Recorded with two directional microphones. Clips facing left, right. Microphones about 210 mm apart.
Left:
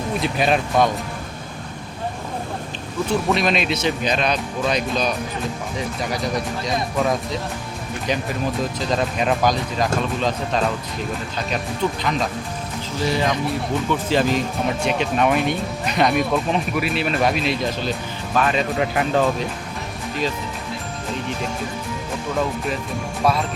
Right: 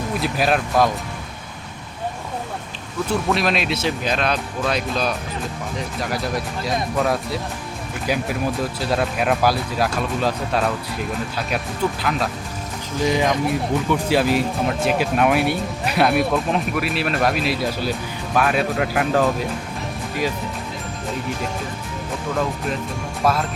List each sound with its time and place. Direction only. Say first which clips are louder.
0.2 s speech: even; centre (ahead or behind)
3.2 s speech: even; centre (ahead or behind)
7.0 s speech: even; 5° right (ahead or behind)
11.8 s speech: even; 10° right (ahead or behind)
13.0 s speech: right 2 dB; 15° right (ahead or behind)
23.2 s speech: even; centre (ahead or behind)